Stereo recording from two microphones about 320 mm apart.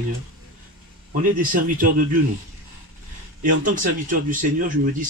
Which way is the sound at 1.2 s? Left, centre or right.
Right.